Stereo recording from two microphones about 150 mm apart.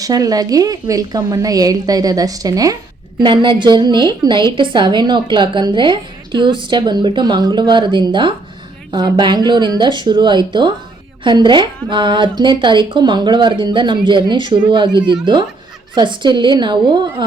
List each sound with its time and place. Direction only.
0.0 s a woman's voice: 25° right (ahead or behind)